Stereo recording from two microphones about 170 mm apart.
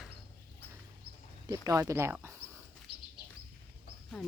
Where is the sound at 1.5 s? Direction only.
20° right (ahead or behind).